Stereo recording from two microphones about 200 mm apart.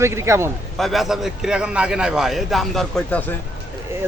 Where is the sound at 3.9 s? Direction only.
10° right (ahead or behind).